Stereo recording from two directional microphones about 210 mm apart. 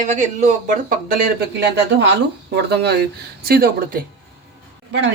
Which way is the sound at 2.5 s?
50° right (ahead or behind).